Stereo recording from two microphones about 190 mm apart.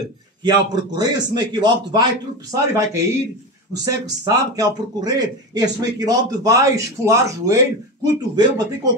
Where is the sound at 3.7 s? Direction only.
20° right (ahead or behind).